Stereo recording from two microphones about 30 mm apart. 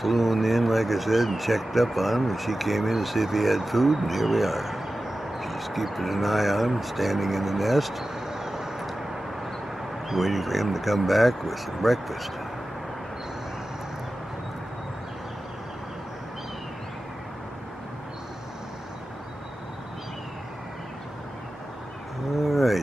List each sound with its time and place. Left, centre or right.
0.0 s speech: centre
8.0 s vehicle: centre
10.0 s speech: centre
22.3 s a sound: centre